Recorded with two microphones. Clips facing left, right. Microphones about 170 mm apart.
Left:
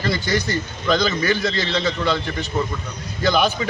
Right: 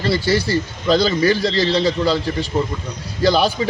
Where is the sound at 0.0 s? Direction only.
30° right (ahead or behind).